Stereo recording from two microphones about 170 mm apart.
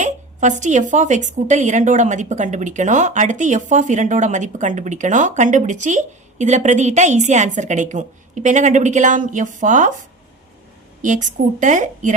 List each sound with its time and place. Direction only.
0.0 s a woman's voice: 45° right (ahead or behind)
11.0 s a woman's voice: 45° right (ahead or behind)